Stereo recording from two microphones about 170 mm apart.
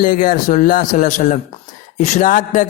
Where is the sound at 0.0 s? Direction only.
55° left (ahead or behind).